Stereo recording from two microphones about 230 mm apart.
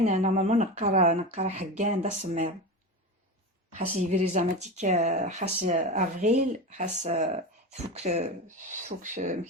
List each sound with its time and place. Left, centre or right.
0.0 s speech: right
4.1 s speech: right